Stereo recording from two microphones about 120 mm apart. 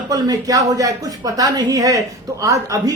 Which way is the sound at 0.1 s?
30° right (ahead or behind).